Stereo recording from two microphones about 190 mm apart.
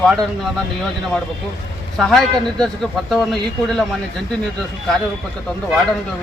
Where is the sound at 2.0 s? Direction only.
Centre (ahead or behind).